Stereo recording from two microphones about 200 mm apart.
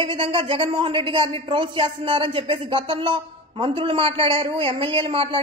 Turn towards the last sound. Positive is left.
turn(degrees=-25)  # may be behind; listen again after turning